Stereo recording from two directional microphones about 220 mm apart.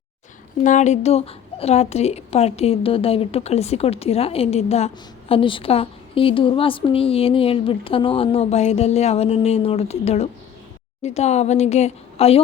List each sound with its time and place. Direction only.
0.6 s a woman's voice: 35° left (ahead or behind)